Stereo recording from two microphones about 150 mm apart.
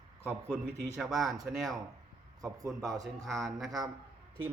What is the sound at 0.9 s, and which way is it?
Speech, centre (ahead or behind).